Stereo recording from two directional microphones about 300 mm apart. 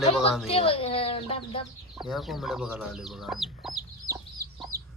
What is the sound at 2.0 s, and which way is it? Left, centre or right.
Speech, centre.